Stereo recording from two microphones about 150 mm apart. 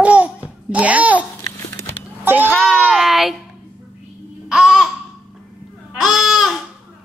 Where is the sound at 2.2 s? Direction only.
15° right (ahead or behind).